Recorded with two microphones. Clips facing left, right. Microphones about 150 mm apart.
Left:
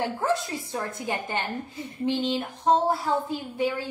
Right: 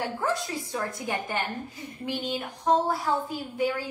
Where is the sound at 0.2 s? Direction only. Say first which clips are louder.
Left 2 dB; 25° left (ahead or behind).